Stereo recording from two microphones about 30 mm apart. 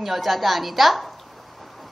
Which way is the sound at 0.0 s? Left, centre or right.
Centre.